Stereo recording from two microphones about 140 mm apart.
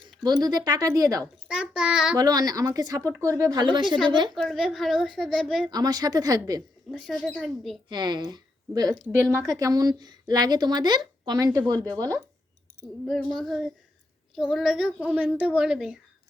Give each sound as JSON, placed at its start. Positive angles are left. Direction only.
{"t": 0.2, "sound": "speech", "side_deg": -30}
{"t": 1.5, "sound": "a woman's voice", "side_deg": -5}
{"t": 2.1, "sound": "speech", "side_deg": -25}
{"t": 4.4, "sound": "a woman's voice", "side_deg": 0}
{"t": 5.7, "sound": "speech", "side_deg": -30}
{"t": 6.9, "sound": "a woman's voice", "side_deg": 5}
{"t": 7.9, "sound": "speech", "side_deg": -30}
{"t": 13.1, "sound": "a woman's voice", "side_deg": 5}